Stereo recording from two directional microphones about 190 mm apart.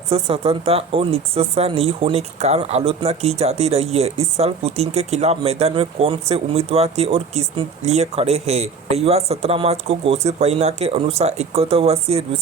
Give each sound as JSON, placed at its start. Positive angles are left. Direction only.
{"t": 0.1, "sound": "speech", "side_deg": -30}